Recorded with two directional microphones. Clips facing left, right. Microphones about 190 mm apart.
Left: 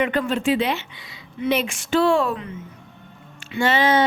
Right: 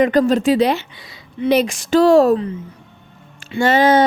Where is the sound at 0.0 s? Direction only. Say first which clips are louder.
Right 7 dB; 40° right (ahead or behind).